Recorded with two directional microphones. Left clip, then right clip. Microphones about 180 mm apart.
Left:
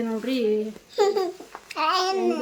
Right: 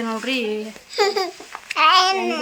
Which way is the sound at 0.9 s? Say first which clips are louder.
Right 3 dB; 30° left (ahead or behind).